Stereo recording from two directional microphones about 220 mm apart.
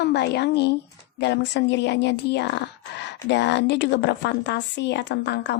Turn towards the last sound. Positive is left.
turn(degrees=55)  # may be behind; listen again after turning